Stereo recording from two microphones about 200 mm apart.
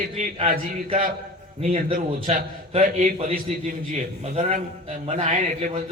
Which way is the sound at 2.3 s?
30° right (ahead or behind).